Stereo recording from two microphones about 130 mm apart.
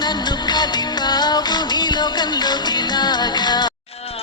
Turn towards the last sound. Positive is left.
turn(degrees=35)  # may be behind; listen again after turning